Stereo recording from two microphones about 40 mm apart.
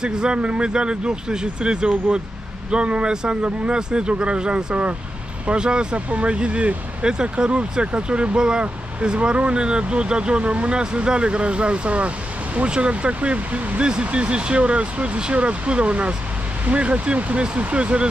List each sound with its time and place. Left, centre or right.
0.0 s speech: right